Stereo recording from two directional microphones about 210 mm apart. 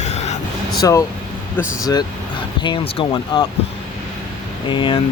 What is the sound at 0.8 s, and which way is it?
Speech, 15° left (ahead or behind).